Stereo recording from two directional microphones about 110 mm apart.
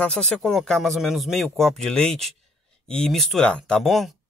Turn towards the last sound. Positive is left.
turn(degrees=0)  # may be behind; listen again after turning